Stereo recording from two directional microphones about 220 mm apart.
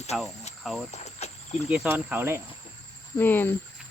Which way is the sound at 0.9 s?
30° left (ahead or behind).